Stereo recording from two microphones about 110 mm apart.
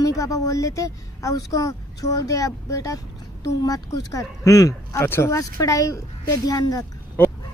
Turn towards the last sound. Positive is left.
turn(degrees=15)  # may be behind; listen again after turning